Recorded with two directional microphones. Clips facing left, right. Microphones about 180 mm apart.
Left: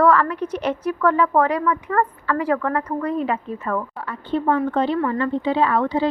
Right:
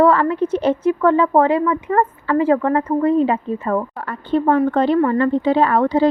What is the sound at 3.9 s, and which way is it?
A woman's voice, 50° right (ahead or behind).